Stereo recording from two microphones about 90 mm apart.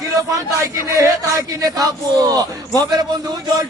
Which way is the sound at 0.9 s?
40° right (ahead or behind).